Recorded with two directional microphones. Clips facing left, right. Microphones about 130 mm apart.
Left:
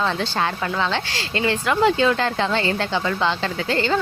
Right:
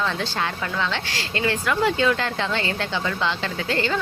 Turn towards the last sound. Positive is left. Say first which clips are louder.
# left 3 dB
turn(degrees=30)  # may be behind; listen again after turning